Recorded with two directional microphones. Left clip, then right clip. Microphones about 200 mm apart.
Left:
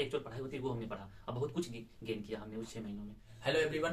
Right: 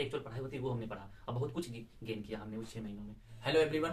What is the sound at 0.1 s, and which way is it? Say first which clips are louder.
Speech: left 1 dB; 5° left (ahead or behind).